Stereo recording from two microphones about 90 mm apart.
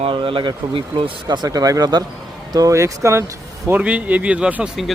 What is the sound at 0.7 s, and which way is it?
Speech, 85° right.